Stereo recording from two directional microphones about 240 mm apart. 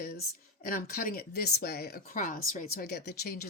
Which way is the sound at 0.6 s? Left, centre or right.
Left.